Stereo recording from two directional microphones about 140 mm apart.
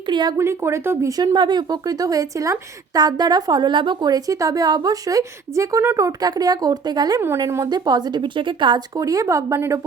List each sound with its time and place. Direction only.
0.1 s a woman's voice: 35° right (ahead or behind)
0.3 s speech: 20° right (ahead or behind); by 8.8 s 35° right (ahead or behind)
9.0 s speech: 25° right (ahead or behind)